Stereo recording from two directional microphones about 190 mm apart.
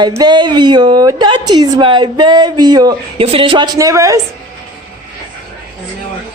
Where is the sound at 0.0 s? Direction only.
20° right (ahead or behind).